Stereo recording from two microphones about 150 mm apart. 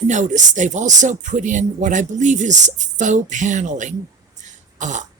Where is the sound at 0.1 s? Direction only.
55° right (ahead or behind).